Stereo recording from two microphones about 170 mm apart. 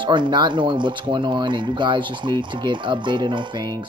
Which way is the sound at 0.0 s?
30° right (ahead or behind).